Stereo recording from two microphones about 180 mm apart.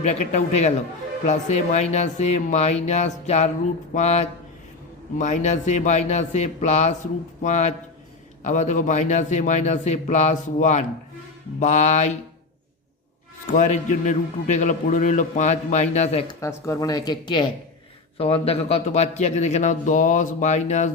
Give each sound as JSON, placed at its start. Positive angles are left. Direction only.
{"t": 0.0, "sound": "a man's voice", "side_deg": 40}
{"t": 13.5, "sound": "a man's voice", "side_deg": 45}
{"t": 16.4, "sound": "a man's voice", "side_deg": 15}